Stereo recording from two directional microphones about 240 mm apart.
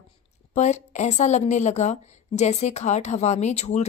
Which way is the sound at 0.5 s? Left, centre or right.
Left.